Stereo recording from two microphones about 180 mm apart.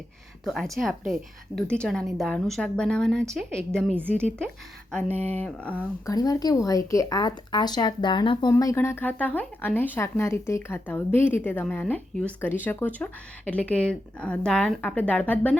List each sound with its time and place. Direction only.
0.4 s a woman's voice: centre (ahead or behind)
6.1 s speech: 20° left (ahead or behind)